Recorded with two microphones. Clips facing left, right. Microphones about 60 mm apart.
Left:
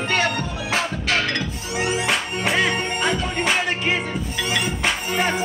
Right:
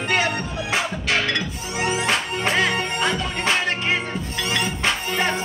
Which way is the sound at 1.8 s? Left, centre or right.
Centre.